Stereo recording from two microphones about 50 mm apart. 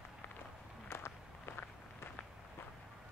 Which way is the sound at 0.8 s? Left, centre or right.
Left.